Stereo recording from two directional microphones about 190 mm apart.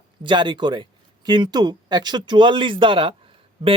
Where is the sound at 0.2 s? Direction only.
25° right (ahead or behind).